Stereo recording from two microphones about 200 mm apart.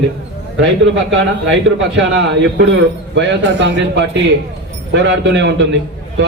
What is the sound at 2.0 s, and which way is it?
A man's voice, 60° right (ahead or behind).